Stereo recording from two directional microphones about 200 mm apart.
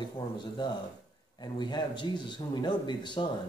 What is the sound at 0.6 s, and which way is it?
Speech, 20° left (ahead or behind).